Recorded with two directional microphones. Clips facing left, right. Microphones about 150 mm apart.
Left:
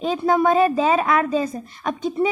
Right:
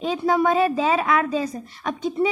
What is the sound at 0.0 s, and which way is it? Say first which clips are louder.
A woman's voice: left 2 dB; 45° left (ahead or behind).